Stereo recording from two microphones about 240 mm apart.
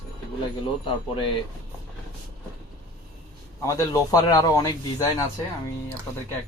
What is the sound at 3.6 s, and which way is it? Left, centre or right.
A man's voice, centre.